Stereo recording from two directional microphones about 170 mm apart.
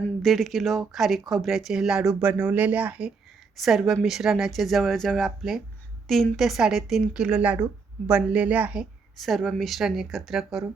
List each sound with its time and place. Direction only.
0.2 s speech: centre (ahead or behind)